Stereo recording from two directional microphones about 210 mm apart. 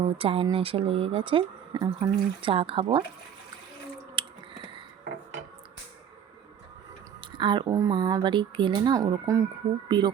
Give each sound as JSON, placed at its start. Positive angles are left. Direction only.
{"t": 0.0, "sound": "a woman's voice", "side_deg": -25}
{"t": 4.1, "sound": "a sound", "side_deg": -25}
{"t": 7.3, "sound": "a woman's voice", "side_deg": -20}